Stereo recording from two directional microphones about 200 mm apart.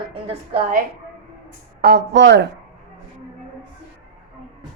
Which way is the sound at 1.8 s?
55° right (ahead or behind).